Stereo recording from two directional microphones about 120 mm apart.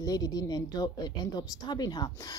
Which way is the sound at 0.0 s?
35° left (ahead or behind).